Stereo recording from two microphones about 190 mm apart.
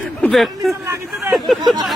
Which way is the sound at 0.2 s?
Centre (ahead or behind).